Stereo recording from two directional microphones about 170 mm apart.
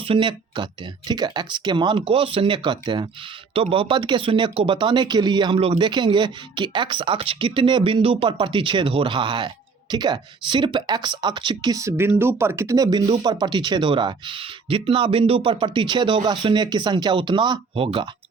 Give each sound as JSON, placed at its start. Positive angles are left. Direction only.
{"t": 0.0, "sound": "speech", "side_deg": -30}